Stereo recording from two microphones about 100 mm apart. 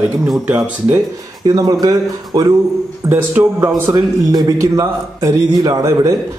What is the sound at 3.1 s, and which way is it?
A man's voice, 25° right (ahead or behind).